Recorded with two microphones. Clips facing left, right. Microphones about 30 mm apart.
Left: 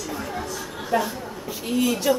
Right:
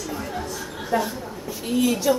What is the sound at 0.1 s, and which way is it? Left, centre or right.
Chatter, centre.